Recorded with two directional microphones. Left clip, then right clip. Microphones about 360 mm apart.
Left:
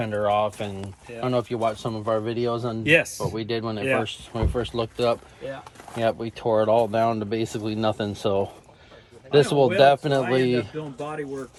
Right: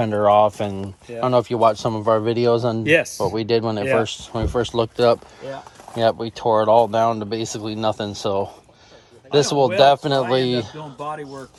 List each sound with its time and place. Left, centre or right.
0.0 s speech: right
0.3 s speech: centre
9.7 s speech: centre